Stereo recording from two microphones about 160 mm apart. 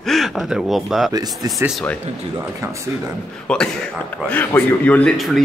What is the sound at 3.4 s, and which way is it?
A man's voice, 5° left (ahead or behind).